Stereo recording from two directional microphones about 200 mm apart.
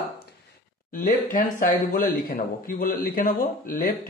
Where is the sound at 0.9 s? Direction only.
45° left (ahead or behind).